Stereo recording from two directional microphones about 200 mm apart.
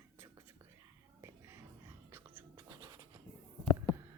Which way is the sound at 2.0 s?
10° right (ahead or behind).